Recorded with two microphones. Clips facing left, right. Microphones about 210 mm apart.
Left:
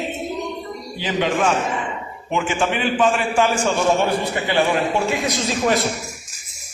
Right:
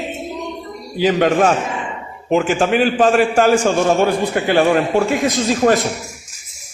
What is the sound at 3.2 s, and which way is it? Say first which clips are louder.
A man's voice: right 6 dB; 40° right (ahead or behind).